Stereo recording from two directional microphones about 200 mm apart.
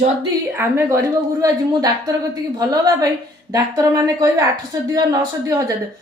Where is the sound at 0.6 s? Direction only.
15° right (ahead or behind).